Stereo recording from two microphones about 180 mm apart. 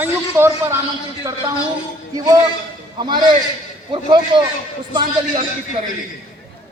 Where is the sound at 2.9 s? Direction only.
25° right (ahead or behind).